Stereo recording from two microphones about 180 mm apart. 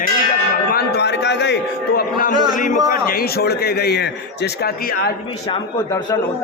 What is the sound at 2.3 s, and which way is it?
Speech, 25° right (ahead or behind).